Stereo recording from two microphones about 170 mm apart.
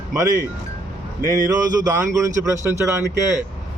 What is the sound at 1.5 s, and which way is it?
A man's voice, 20° right (ahead or behind).